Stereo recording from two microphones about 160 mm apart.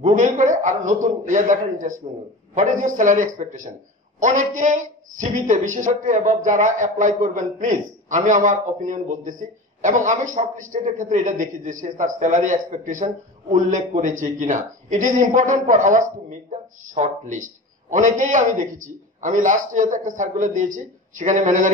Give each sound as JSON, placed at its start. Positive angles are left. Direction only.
{"t": 0.0, "sound": "a man's voice", "side_deg": -55}